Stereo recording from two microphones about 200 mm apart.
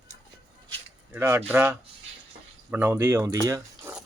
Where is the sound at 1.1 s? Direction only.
10° right (ahead or behind).